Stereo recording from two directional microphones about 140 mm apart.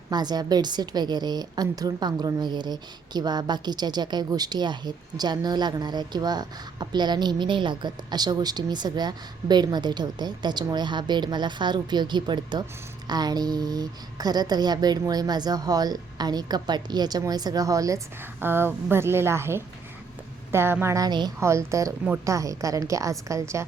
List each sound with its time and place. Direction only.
0.1 s a woman's voice: 30° right (ahead or behind)